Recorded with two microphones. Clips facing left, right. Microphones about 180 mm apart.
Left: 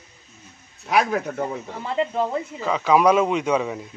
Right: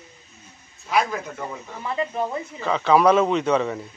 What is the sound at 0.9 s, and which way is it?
Speech, 70° left (ahead or behind).